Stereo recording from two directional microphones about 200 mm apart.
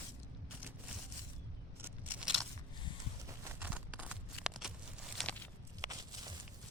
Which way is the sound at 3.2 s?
10° right (ahead or behind).